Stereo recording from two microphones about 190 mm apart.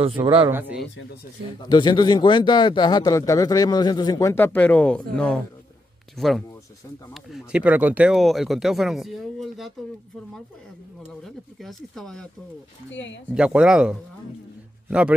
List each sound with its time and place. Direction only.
0.0 s speech: 30° right (ahead or behind)
0.5 s speech: 10° right (ahead or behind)
1.6 s a man's voice: 20° left (ahead or behind); by 9.7 s centre (ahead or behind)
11.2 s speech: centre (ahead or behind)
12.9 s speech: 75° left (ahead or behind)
13.3 s a man's voice: 5° right (ahead or behind)